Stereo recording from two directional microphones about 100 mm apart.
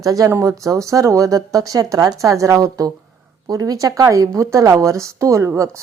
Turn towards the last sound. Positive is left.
turn(degrees=-30)  # may be behind; listen again after turning